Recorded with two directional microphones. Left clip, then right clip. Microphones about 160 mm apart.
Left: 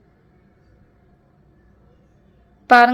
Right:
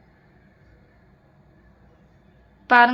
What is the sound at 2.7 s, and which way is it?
Speech, 30° left (ahead or behind).